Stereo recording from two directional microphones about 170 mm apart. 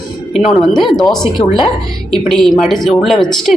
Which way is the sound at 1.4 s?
30° left (ahead or behind).